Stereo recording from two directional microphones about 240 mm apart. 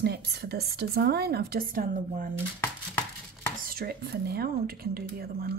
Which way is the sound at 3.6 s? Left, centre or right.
Right.